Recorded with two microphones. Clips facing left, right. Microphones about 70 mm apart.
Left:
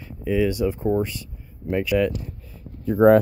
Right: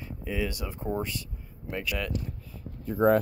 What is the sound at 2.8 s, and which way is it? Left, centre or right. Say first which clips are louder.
Speech: left 8 dB; left.